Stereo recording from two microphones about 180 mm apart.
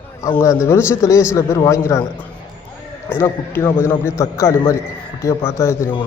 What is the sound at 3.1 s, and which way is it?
A man's voice, 15° left (ahead or behind).